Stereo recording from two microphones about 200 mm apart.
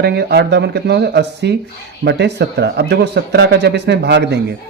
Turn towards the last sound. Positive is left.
turn(degrees=-55)  # may be behind; listen again after turning